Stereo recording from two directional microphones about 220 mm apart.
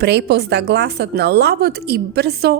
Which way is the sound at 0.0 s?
50° right (ahead or behind).